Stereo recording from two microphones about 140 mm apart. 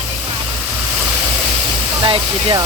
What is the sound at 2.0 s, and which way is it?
Speech, 35° right (ahead or behind).